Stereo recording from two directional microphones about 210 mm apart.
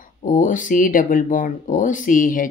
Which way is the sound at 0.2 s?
40° left (ahead or behind).